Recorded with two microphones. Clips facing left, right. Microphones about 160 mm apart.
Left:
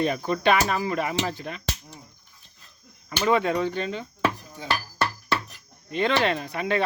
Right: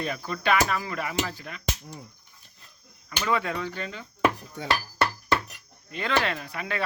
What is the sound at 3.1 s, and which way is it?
Music, 25° left (ahead or behind).